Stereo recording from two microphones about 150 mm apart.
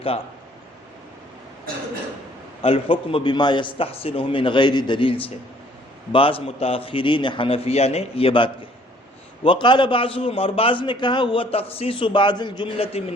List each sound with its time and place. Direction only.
2.6 s a man's voice: 40° left (ahead or behind)